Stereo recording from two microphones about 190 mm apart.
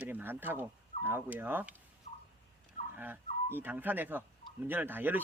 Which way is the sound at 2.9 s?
10° right (ahead or behind).